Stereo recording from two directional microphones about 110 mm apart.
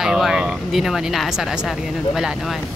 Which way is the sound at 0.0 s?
5° right (ahead or behind).